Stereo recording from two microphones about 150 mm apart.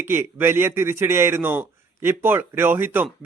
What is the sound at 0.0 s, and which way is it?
A man's voice, 15° right (ahead or behind).